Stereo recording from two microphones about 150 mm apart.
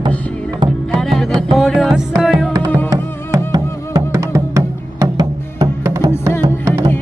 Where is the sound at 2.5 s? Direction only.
25° right (ahead or behind).